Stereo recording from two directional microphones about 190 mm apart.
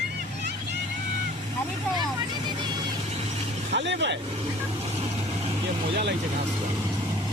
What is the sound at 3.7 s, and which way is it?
Speech, 70° right (ahead or behind).